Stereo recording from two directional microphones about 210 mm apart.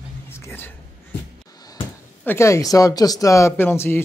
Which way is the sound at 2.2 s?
10° left (ahead or behind).